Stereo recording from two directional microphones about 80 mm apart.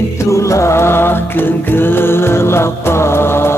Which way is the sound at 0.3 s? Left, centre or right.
Left.